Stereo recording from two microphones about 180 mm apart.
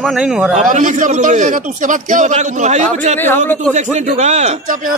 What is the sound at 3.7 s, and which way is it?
A man's voice, 40° right (ahead or behind).